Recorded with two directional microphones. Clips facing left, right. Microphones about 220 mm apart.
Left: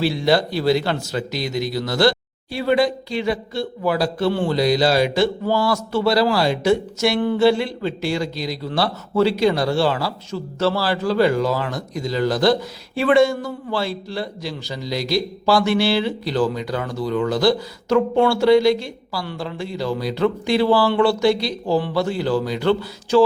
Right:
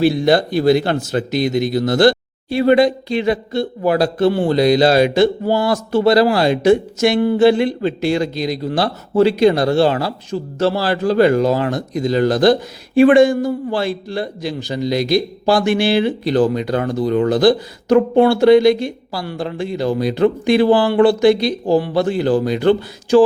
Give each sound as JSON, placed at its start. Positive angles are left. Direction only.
{"t": 0.0, "sound": "speech", "side_deg": -50}
{"t": 2.5, "sound": "speech", "side_deg": -20}